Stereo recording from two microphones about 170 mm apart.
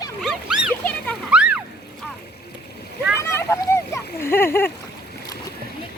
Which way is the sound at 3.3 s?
15° left (ahead or behind).